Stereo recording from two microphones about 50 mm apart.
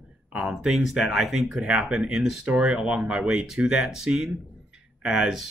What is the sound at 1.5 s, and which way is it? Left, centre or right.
Speech, right.